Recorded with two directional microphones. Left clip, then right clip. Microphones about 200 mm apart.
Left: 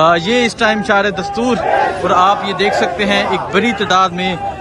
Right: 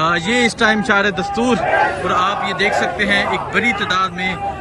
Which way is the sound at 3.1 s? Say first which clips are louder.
Left 2 dB; 90° left.